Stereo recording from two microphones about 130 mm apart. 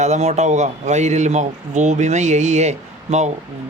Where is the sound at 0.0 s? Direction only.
60° right (ahead or behind).